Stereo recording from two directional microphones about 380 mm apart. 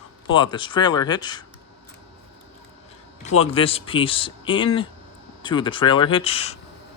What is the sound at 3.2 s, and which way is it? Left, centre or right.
Speech, centre.